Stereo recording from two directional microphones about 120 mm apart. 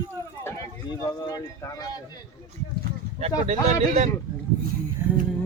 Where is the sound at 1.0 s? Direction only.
30° left (ahead or behind).